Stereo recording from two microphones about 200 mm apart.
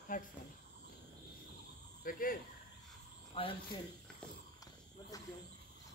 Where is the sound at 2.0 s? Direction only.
45° left (ahead or behind).